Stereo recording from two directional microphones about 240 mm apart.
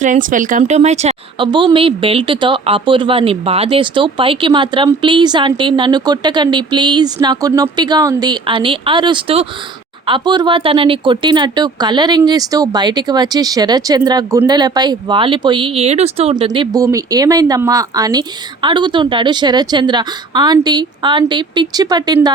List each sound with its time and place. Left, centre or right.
0.0 s speech: right; by 22.3 s centre